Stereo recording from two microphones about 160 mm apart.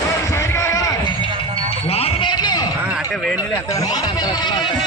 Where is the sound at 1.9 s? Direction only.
40° left (ahead or behind).